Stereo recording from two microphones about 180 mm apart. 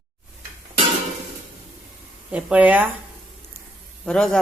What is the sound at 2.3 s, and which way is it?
Speech, 10° right (ahead or behind).